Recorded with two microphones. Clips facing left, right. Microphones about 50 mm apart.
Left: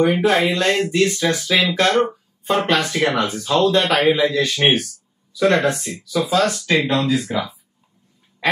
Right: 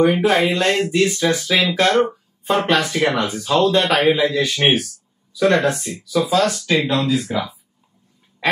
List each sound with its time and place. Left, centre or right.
0.0 s speech: centre
4.6 s speech: centre